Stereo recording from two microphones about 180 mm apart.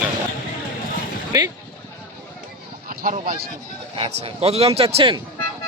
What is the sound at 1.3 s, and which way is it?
Speech, 20° right (ahead or behind).